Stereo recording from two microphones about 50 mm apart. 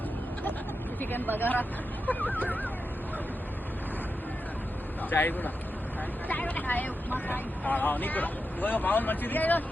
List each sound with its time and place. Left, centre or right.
1.1 s speech: left
5.0 s speech: left